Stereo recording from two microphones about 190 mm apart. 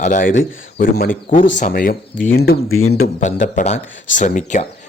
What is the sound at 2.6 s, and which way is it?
Speech, 90° left.